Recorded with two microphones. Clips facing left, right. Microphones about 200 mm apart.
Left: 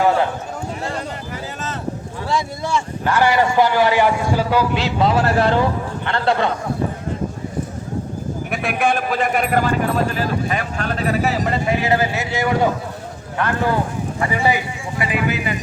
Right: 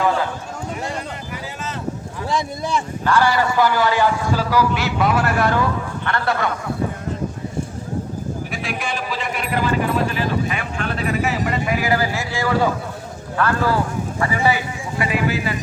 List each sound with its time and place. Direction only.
2.3 s speech: 20° right (ahead or behind)
3.0 s a man's voice: 20° left (ahead or behind)
8.4 s a man's voice: 60° left (ahead or behind); by 15.5 s 20° left (ahead or behind)